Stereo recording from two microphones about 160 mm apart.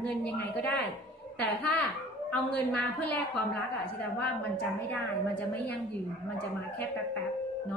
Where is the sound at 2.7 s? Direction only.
5° left (ahead or behind).